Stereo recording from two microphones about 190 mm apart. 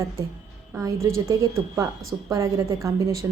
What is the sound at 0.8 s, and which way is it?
A woman's voice, 15° right (ahead or behind).